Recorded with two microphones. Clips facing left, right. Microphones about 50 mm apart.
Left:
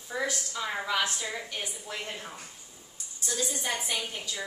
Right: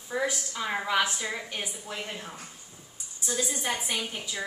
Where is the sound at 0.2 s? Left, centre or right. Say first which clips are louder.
Right 1 dB; centre.